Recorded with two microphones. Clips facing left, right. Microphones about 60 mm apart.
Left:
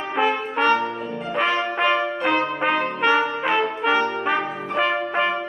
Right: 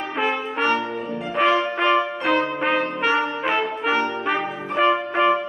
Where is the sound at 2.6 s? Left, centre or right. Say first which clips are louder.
Even; centre.